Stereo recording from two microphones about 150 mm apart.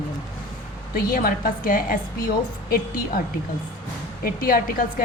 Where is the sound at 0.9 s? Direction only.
75° left (ahead or behind).